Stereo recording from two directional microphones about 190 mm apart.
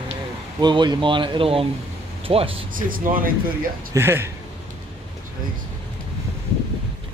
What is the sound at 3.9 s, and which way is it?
Speech, 10° right (ahead or behind).